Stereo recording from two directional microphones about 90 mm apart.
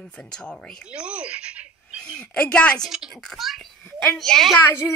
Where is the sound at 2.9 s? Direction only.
5° right (ahead or behind).